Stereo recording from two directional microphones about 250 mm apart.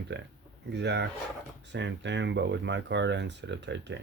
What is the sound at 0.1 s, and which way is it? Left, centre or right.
Speech, right.